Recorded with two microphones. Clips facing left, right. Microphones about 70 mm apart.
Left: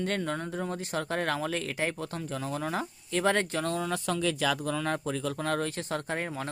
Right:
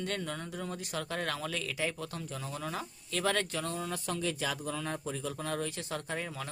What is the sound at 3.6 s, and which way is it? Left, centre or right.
Speech, left.